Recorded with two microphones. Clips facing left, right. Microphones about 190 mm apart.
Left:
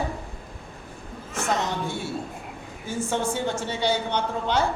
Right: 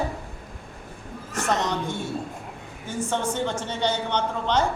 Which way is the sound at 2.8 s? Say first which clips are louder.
Even; 10° left (ahead or behind).